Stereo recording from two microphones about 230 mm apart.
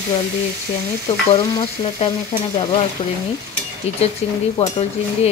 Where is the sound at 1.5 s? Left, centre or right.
Left.